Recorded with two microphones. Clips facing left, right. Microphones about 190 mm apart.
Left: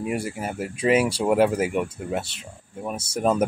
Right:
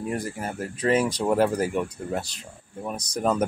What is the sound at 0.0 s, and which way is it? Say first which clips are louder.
Speech: left 2 dB; 10° left (ahead or behind).